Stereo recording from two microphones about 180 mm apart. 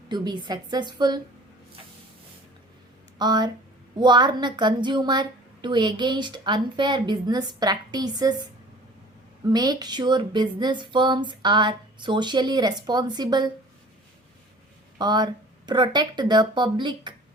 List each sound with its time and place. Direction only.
0.1 s a woman's voice: 25° right (ahead or behind)
3.2 s a woman's voice: 25° right (ahead or behind)
9.5 s a woman's voice: 20° right (ahead or behind)
14.9 s a woman's voice: 25° right (ahead or behind)